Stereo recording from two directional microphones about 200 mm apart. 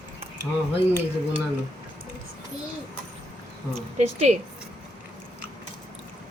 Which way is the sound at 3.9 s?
35° right (ahead or behind).